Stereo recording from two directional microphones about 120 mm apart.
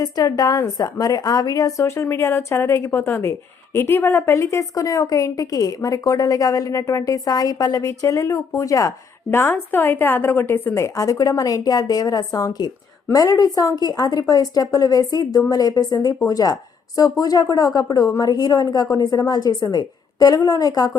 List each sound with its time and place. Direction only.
0.0 s a woman's voice: 30° left (ahead or behind)